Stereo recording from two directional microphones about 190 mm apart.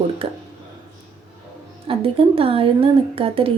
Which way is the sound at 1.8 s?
30° right (ahead or behind).